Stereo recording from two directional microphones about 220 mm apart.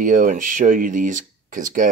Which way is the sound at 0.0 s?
35° right (ahead or behind).